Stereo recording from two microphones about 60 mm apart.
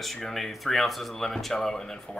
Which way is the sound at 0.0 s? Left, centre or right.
Centre.